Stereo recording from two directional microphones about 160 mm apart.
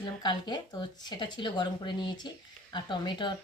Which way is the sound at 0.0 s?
30° left (ahead or behind).